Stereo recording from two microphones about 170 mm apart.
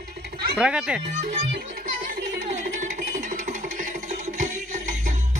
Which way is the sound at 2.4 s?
45° right (ahead or behind).